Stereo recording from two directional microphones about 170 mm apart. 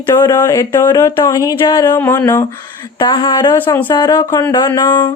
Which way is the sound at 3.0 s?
25° left (ahead or behind).